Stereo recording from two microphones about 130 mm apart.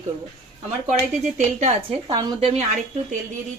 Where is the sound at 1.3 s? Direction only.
65° right (ahead or behind).